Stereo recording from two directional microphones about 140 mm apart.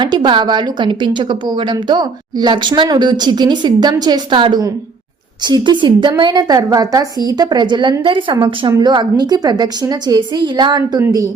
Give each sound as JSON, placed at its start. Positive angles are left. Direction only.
{"t": 0.0, "sound": "a woman's voice", "side_deg": -30}